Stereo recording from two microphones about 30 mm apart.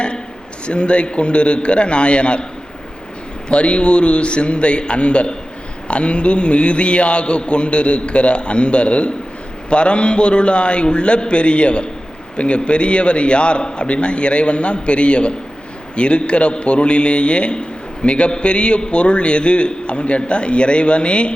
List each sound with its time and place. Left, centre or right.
0.6 s a man's voice: left
3.5 s a man's voice: left